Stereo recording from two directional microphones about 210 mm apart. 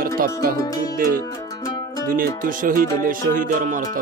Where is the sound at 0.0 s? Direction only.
40° right (ahead or behind).